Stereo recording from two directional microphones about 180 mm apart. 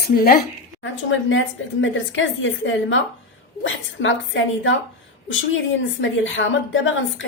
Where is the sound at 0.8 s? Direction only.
90° left.